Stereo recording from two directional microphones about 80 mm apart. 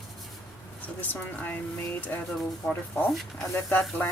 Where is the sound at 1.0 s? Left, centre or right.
Left.